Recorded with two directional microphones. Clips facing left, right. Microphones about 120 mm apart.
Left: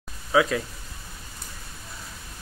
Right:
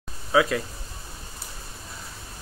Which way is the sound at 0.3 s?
Centre (ahead or behind).